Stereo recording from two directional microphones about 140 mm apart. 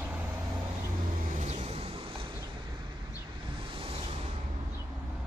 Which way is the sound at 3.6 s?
40° right (ahead or behind).